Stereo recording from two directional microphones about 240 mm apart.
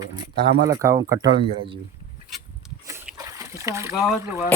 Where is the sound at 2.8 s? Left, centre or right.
Centre.